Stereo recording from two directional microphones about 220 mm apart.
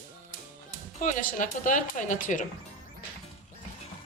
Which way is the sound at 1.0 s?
35° left (ahead or behind).